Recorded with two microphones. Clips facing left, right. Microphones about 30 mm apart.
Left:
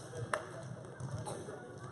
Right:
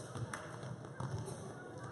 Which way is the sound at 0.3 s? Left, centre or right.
Left.